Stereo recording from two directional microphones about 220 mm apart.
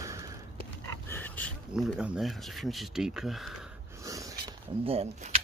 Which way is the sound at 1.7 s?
5° right (ahead or behind).